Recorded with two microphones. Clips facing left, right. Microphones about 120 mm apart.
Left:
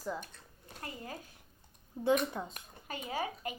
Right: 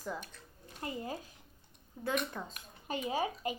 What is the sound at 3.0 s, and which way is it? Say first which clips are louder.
Speech: right 2 dB; 20° right (ahead or behind).